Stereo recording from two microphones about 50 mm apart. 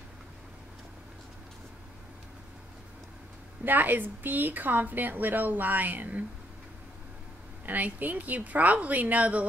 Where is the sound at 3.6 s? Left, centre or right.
Right.